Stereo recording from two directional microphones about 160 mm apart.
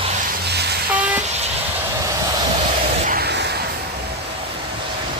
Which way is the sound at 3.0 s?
70° right (ahead or behind).